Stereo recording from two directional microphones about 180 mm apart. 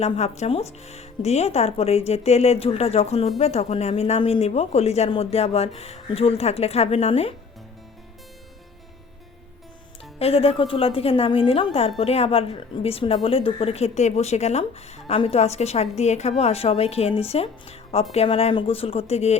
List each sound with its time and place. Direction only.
0.0 s speech: 35° left (ahead or behind)
10.2 s speech: 35° left (ahead or behind)